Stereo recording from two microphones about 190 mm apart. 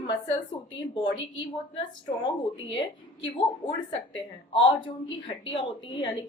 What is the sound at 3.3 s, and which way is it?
A woman's voice, 25° left (ahead or behind).